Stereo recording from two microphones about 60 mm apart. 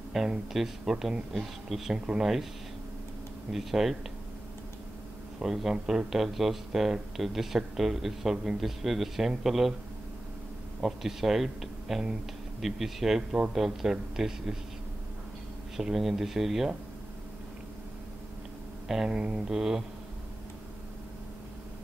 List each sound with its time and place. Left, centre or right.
0.1 s speech: centre
3.5 s speech: centre
5.4 s speech: centre
10.8 s speech: centre
15.7 s speech: centre
19.0 s speech: centre